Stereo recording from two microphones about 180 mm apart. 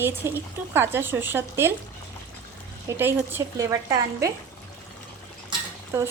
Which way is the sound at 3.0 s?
15° right (ahead or behind).